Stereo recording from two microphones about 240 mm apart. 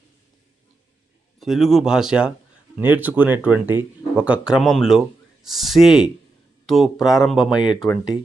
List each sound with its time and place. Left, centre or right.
1.4 s speech: centre